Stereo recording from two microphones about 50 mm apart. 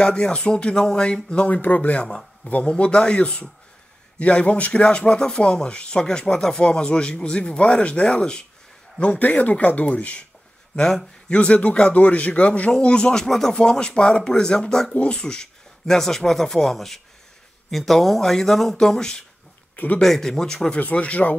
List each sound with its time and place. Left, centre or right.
0.0 s speech: centre
1.4 s speech: left
10.8 s a man's voice: centre
11.3 s speech: left
15.0 s speech: left
15.9 s speech: centre
19.7 s speech: left
20.0 s speech: centre
20.9 s speech: left